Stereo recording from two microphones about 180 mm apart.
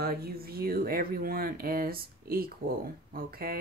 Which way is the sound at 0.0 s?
55° right (ahead or behind).